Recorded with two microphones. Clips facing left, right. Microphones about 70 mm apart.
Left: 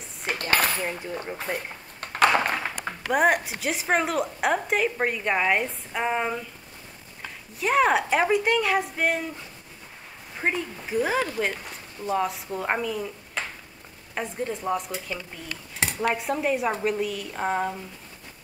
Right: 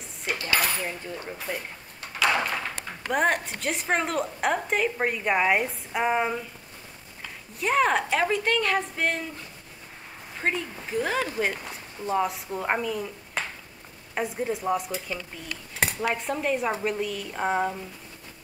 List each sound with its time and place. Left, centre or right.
0.3 s dishes: left
1.4 s drawer open or close: left
3.1 s a woman's voice: centre
7.6 s a woman's voice: centre
10.4 s a woman's voice: centre